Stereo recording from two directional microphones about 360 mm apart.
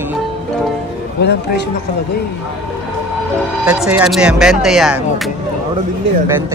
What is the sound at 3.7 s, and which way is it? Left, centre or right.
Speech, centre.